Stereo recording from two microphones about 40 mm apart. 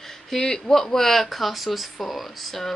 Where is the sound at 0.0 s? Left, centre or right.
Centre.